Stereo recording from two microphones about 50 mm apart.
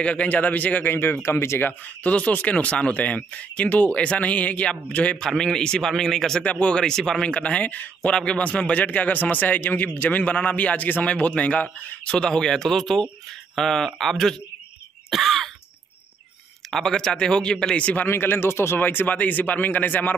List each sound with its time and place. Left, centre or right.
0.0 s a man's voice: left
0.3 s speech: left
1.2 s speech: left
1.7 s a man's voice: left
5.4 s speech: centre
6.4 s a man's voice: left
6.8 s speech: centre
7.2 s a man's voice: left
8.1 s a man's voice: centre
15.0 s throat clearing: centre
16.7 s speech: centre
18.0 s speech: left
18.8 s speech: left